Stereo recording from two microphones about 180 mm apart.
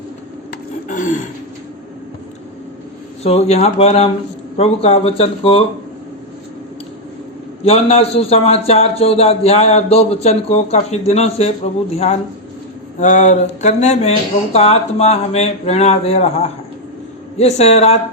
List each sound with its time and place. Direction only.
0.9 s a sound: 45° left (ahead or behind)
3.2 s a man's voice: 35° left (ahead or behind)
7.6 s a man's voice: 35° left (ahead or behind)